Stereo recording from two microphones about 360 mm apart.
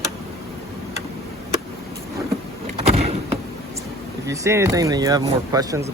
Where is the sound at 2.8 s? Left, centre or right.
Centre.